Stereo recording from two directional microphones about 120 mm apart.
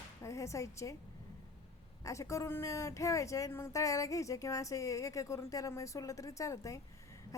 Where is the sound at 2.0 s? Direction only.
25° left (ahead or behind).